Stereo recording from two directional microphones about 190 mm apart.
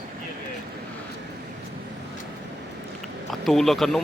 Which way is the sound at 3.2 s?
Centre (ahead or behind).